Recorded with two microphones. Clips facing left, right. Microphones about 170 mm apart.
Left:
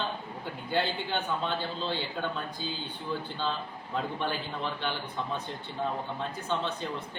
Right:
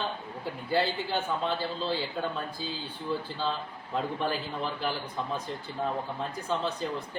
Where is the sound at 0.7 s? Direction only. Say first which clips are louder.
Right 2 dB; 5° right (ahead or behind).